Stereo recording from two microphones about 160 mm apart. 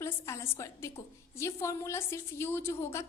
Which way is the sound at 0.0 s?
15° left (ahead or behind).